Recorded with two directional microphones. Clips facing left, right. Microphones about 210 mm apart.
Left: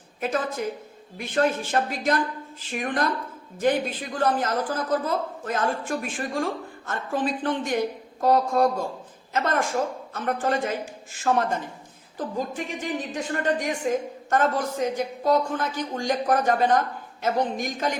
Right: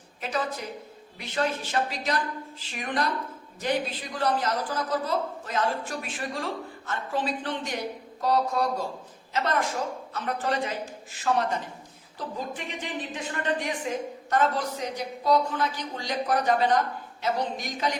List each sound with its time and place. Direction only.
0.2 s a woman's voice: 50° left (ahead or behind)